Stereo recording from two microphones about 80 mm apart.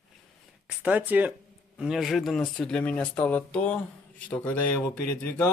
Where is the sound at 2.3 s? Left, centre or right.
Centre.